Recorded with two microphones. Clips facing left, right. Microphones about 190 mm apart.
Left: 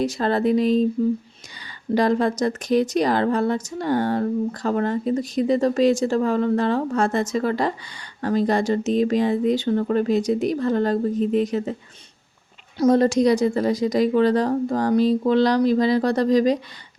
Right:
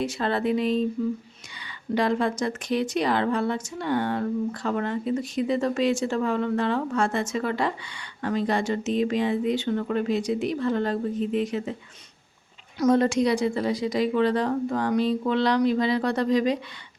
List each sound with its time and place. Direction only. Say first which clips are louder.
0.0 s speech: left 5 dB; 40° left (ahead or behind)
2.0 s speech: left 4 dB; 40° left (ahead or behind)
12.8 s speech: left 4 dB; 35° left (ahead or behind)